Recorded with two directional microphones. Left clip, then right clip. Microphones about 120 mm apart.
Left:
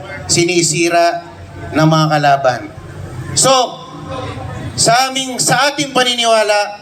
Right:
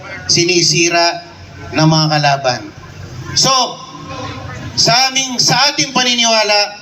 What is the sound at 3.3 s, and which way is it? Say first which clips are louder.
Speech: left 1 dB; 45° left (ahead or behind).